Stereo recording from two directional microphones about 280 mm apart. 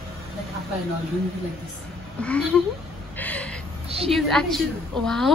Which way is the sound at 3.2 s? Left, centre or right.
Centre.